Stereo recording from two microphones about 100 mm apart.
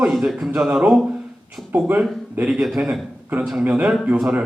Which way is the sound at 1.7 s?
15° right (ahead or behind).